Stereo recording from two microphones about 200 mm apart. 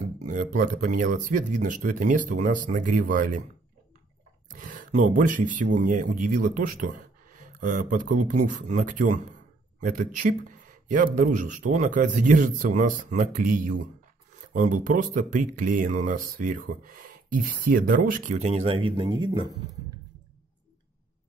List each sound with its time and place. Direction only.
0.0 s speech: 40° right (ahead or behind)
4.5 s speech: 40° right (ahead or behind); by 19.5 s 25° right (ahead or behind)